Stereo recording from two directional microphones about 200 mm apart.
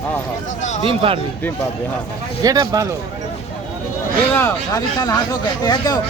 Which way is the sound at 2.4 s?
20° right (ahead or behind).